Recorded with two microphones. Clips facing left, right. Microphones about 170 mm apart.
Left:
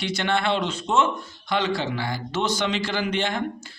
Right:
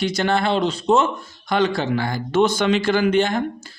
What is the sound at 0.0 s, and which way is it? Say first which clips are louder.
Speech: right 4 dB; 40° right (ahead or behind).